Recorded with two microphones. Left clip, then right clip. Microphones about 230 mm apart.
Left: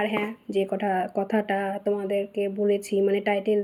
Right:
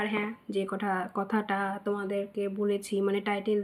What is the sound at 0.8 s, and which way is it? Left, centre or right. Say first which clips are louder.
Speech: left 6 dB; right.